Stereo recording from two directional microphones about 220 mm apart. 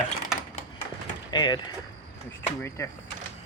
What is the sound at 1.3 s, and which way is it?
Speech, 20° left (ahead or behind).